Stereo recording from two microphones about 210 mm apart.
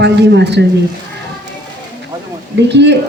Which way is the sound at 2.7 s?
55° right (ahead or behind).